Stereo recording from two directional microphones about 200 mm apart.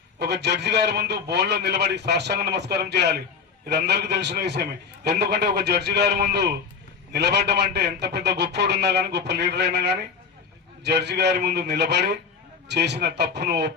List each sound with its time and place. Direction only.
0.2 s a man's voice: 55° right (ahead or behind)